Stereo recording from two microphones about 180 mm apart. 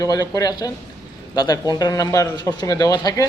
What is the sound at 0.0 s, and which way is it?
A man's voice, 20° left (ahead or behind).